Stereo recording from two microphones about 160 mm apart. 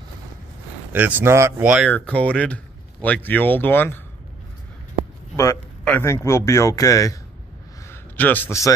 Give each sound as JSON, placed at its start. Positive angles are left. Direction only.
{"t": 0.9, "sound": "speech", "side_deg": -10}
{"t": 1.9, "sound": "speech", "side_deg": 10}
{"t": 5.3, "sound": "a man's voice", "side_deg": 20}